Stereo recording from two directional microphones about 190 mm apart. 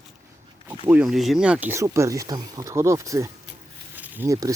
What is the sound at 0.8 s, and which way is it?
Speech, 5° right (ahead or behind).